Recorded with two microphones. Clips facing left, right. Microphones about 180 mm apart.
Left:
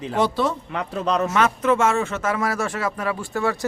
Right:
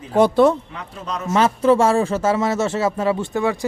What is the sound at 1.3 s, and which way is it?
A man's voice, 30° right (ahead or behind).